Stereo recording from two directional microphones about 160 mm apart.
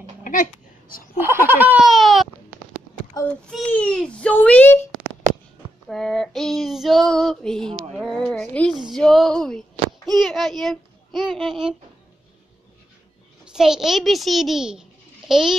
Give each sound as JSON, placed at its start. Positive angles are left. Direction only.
{"t": 0.2, "sound": "a sound", "side_deg": 55}
{"t": 1.2, "sound": "a sound", "side_deg": -10}
{"t": 1.9, "sound": "baby cry", "side_deg": 0}
{"t": 3.4, "sound": "a child's voice", "side_deg": 5}
{"t": 5.9, "sound": "female singing", "side_deg": 0}
{"t": 7.9, "sound": "speech", "side_deg": 0}
{"t": 11.3, "sound": "female singing", "side_deg": 0}
{"t": 13.5, "sound": "a child's voice", "side_deg": -5}